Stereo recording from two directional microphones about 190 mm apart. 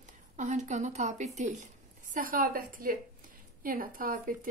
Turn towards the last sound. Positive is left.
turn(degrees=-45)  # may be behind; listen again after turning